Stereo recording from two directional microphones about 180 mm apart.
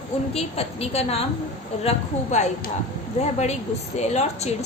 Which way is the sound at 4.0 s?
40° left (ahead or behind).